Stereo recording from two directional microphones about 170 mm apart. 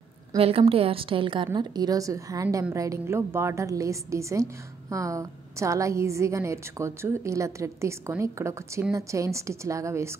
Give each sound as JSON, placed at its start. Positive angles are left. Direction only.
{"t": 0.4, "sound": "a woman's voice", "side_deg": -35}